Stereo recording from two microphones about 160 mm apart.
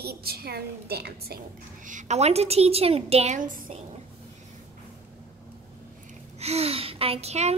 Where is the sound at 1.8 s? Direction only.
50° right (ahead or behind).